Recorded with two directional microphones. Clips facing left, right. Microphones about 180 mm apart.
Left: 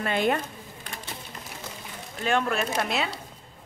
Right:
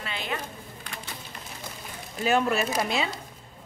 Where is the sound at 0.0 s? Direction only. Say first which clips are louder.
Left 9 dB; 50° left (ahead or behind).